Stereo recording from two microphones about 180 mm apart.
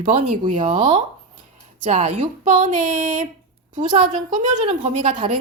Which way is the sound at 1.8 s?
40° right (ahead or behind).